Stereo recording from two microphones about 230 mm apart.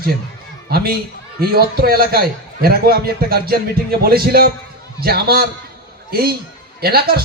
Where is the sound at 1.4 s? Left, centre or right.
Right.